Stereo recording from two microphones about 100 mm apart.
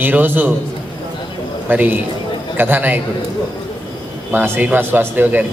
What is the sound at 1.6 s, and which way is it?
A man's voice, 15° right (ahead or behind).